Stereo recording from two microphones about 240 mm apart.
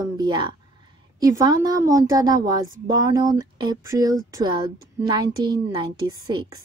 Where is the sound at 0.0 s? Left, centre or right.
Centre.